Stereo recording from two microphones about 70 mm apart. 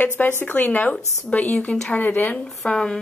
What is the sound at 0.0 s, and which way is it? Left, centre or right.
A woman's voice, left.